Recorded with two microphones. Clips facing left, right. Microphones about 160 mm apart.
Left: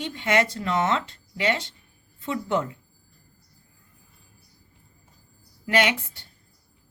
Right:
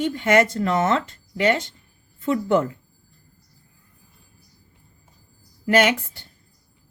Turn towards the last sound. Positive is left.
turn(degrees=-45)  # may be behind; listen again after turning